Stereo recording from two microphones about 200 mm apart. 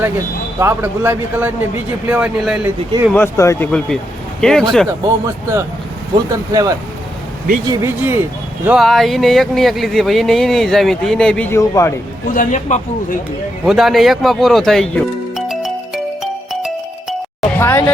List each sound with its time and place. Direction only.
0.6 s a man's voice: 10° right (ahead or behind)
3.1 s speech: 10° left (ahead or behind)
3.7 s speech: 5° left (ahead or behind)
5.2 s a man's voice: 15° right (ahead or behind); by 11.9 s 15° left (ahead or behind)
12.3 s speech: 40° left (ahead or behind)
13.7 s speech: centre (ahead or behind)
16.2 s music: centre (ahead or behind)
17.6 s speech: 10° left (ahead or behind)